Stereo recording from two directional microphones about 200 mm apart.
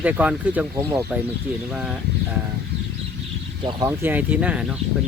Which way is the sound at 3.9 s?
10° right (ahead or behind).